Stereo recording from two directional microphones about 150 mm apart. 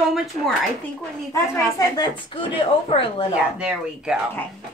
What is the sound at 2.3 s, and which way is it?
Speech, 35° left (ahead or behind).